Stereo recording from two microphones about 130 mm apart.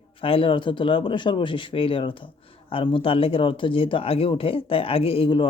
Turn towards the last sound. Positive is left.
turn(degrees=40)  # may be behind; listen again after turning